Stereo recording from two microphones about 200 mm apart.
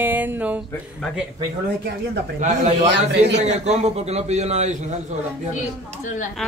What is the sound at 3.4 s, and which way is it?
A man's voice, 35° right (ahead or behind).